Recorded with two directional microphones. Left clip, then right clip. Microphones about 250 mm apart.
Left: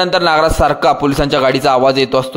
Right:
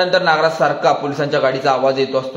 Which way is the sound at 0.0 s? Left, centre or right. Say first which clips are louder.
Left 2 dB; left.